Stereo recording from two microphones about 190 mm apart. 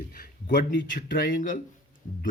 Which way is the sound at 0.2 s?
45° left (ahead or behind).